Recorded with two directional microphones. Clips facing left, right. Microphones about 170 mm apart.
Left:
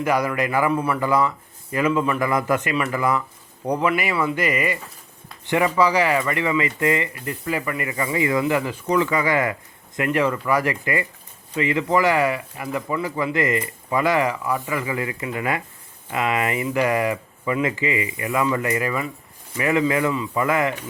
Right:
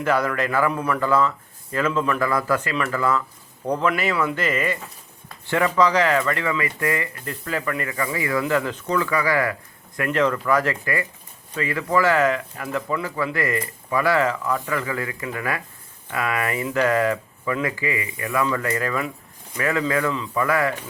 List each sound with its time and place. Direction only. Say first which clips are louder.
0.0 s speech: even; 10° left (ahead or behind)